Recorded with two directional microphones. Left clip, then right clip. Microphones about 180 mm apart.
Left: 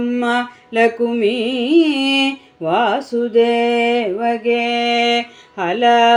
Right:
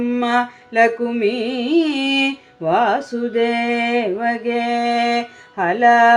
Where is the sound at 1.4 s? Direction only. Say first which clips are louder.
Left 3 dB; 20° left (ahead or behind).